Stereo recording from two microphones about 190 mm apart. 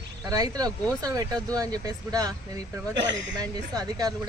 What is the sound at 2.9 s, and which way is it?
Speech, 70° right (ahead or behind).